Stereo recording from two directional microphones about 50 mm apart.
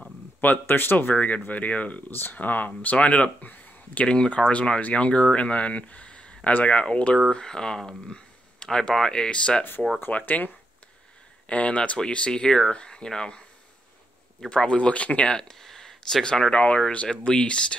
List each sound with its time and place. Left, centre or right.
0.4 s speech: left
0.9 s speech: left
4.0 s speech: left
7.2 s speech: centre
10.1 s speech: left; by 13.4 s centre
14.5 s speech: left